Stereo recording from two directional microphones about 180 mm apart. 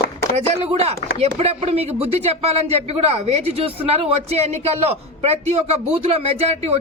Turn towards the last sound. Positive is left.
turn(degrees=-35)  # may be behind; listen again after turning